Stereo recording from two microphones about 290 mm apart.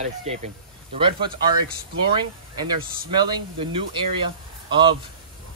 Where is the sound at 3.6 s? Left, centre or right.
Centre.